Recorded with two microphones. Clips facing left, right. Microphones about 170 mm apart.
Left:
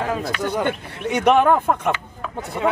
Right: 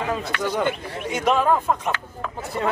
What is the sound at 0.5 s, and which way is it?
Speech, 60° left (ahead or behind).